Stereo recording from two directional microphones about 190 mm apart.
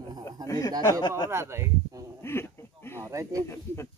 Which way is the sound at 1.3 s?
15° right (ahead or behind).